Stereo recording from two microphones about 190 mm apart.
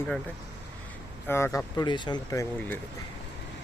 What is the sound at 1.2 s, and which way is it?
Speech, 15° left (ahead or behind).